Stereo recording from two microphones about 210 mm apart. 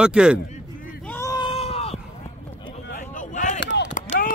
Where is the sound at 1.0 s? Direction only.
10° left (ahead or behind); by 3.5 s 35° left (ahead or behind).